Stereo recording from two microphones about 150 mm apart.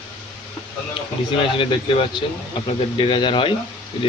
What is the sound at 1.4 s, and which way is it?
Speech, 35° left (ahead or behind).